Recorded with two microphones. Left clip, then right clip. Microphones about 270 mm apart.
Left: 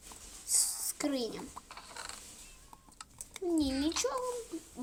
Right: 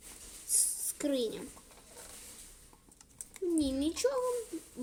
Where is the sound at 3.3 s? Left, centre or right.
Left.